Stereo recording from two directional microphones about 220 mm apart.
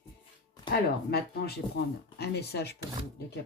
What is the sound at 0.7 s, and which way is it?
Speech, 45° left (ahead or behind).